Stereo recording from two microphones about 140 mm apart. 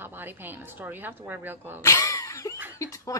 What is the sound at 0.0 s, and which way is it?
A woman's voice, 15° right (ahead or behind).